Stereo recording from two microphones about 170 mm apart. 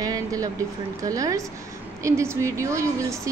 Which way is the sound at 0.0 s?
20° right (ahead or behind).